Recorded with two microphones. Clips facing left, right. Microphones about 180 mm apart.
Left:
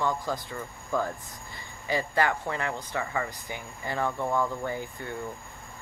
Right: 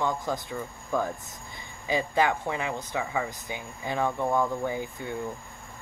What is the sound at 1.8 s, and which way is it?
Speech, 15° right (ahead or behind).